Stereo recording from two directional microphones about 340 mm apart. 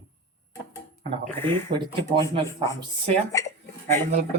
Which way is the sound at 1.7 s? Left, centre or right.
Centre.